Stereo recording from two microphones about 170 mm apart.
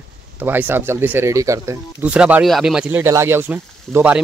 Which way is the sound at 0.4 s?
10° right (ahead or behind).